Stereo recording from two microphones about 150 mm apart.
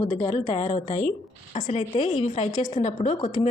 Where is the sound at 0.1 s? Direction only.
45° left (ahead or behind).